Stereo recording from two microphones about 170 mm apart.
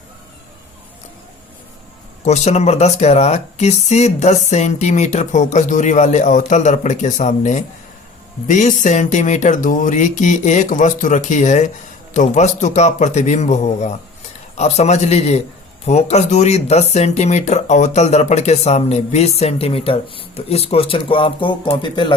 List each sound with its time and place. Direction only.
2.2 s speech: 40° left (ahead or behind)